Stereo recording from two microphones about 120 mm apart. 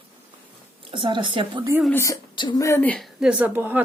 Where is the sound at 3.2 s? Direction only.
10° right (ahead or behind).